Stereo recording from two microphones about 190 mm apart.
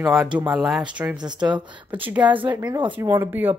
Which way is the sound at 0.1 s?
5° right (ahead or behind).